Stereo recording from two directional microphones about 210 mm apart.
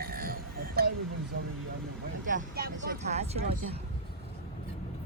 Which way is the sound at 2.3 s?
40° right (ahead or behind).